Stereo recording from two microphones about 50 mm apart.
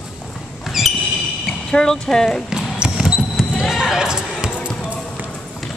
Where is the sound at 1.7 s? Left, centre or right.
Centre.